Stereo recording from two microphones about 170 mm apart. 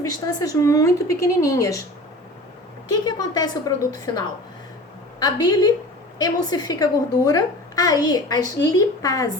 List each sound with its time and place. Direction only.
0.1 s a woman's voice: 20° left (ahead or behind)
2.9 s a woman's voice: 25° left (ahead or behind)
5.2 s a woman's voice: 25° left (ahead or behind)